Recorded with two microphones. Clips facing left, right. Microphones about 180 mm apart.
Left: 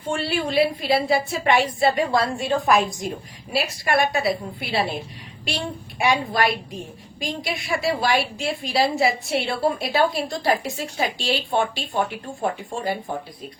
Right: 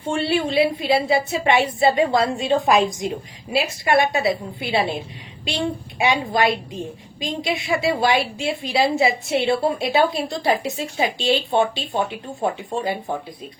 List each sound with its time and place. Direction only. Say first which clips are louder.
0.1 s a woman's voice: right 3 dB; 25° right (ahead or behind)